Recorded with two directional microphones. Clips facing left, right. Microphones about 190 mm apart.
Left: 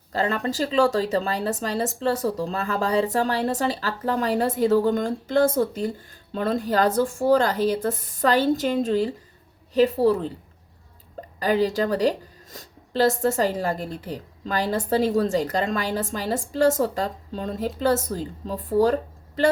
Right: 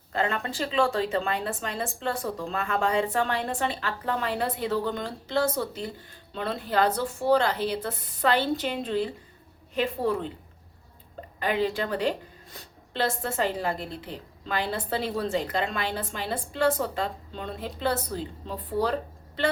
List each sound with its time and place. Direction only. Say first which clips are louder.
0.1 s a woman's voice: left 4 dB; 35° left (ahead or behind)
11.3 s a woman's voice: left 5 dB; 40° left (ahead or behind)